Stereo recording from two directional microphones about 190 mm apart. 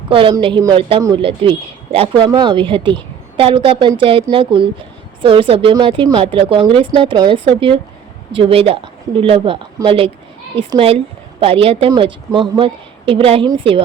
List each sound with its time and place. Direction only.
0.1 s speech: 25° right (ahead or behind)